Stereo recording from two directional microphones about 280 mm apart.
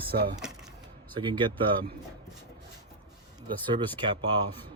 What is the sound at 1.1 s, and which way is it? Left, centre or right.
Speech, centre.